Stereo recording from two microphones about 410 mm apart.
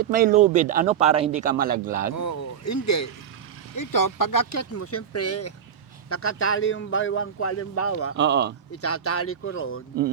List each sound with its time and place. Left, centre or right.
0.0 s speech: centre
2.1 s a man's voice: left
4.8 s a man's voice: left
8.1 s speech: right
8.7 s a man's voice: left